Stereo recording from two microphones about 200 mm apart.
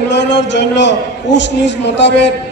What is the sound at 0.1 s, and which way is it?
A man's voice, 60° left (ahead or behind).